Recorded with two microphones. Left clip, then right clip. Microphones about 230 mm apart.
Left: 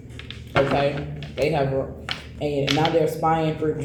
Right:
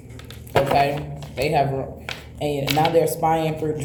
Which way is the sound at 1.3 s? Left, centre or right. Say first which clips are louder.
Right 1 dB; right.